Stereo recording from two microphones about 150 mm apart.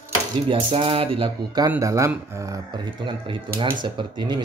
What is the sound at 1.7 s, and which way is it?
Speech, 20° right (ahead or behind).